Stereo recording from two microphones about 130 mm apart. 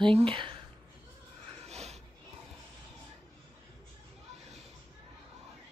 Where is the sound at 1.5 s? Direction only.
55° right (ahead or behind).